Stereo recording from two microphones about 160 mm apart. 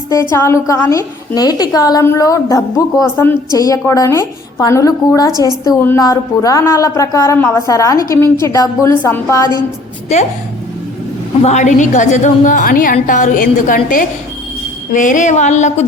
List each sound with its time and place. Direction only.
0.1 s a woman's voice: 20° left (ahead or behind)
11.4 s a woman's voice: 50° left (ahead or behind)